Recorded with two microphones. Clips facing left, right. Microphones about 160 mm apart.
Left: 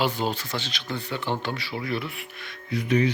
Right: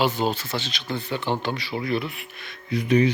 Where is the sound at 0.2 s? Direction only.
10° right (ahead or behind).